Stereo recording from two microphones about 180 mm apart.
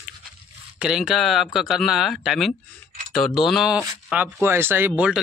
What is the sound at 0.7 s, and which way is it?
Speech, 5° right (ahead or behind).